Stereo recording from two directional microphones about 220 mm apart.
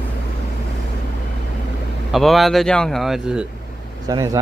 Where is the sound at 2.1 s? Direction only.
Centre (ahead or behind).